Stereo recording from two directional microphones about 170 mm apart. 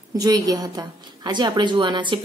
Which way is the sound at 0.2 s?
20° right (ahead or behind).